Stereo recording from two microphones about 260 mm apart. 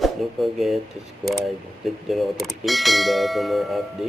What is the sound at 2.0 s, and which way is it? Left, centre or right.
Bell, centre.